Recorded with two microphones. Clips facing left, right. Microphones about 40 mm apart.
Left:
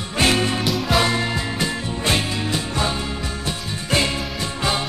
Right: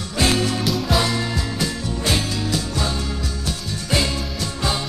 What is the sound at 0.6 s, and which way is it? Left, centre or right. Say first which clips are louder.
Music: left 1 dB; centre.